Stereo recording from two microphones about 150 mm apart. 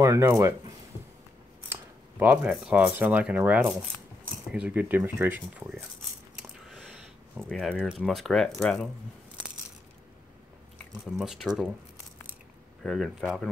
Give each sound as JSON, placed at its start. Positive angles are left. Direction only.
{"t": 0.0, "sound": "speech", "side_deg": -20}
{"t": 1.7, "sound": "speech", "side_deg": -10}
{"t": 7.3, "sound": "speech", "side_deg": 0}
{"t": 11.1, "sound": "speech", "side_deg": 0}
{"t": 12.8, "sound": "speech", "side_deg": 0}